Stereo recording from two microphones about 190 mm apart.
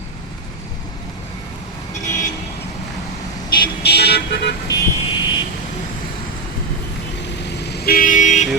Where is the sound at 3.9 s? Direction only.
60° left (ahead or behind).